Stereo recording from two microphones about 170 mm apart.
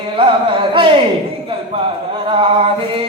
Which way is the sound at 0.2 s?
30° right (ahead or behind).